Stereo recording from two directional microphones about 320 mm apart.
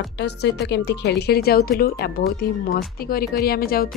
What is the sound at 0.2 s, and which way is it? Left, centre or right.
A woman's voice, left.